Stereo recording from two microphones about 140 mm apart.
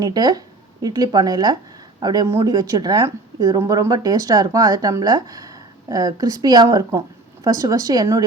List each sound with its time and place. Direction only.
0.0 s speech: 30° right (ahead or behind)